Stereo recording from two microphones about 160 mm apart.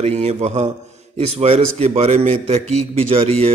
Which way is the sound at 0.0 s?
40° right (ahead or behind).